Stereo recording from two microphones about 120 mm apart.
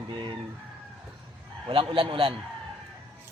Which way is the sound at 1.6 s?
45° right (ahead or behind).